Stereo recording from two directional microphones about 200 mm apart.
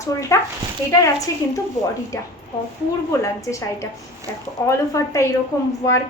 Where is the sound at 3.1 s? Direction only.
15° left (ahead or behind).